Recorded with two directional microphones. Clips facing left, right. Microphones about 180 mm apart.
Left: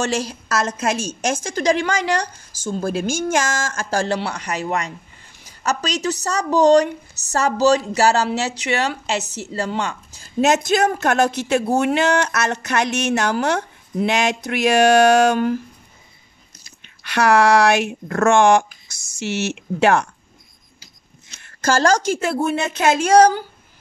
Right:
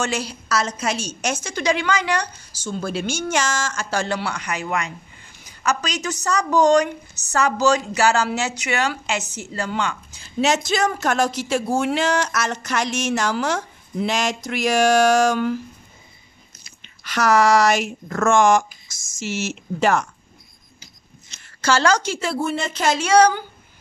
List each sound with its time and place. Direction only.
0.0 s a woman's voice: 45° left (ahead or behind)
4.0 s a woman's voice: 35° left (ahead or behind); by 15.5 s 55° left (ahead or behind)
17.0 s speech: 65° left (ahead or behind)
21.4 s a woman's voice: 50° left (ahead or behind)